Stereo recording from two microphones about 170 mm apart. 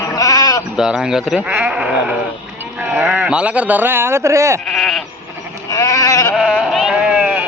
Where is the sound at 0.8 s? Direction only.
5° right (ahead or behind).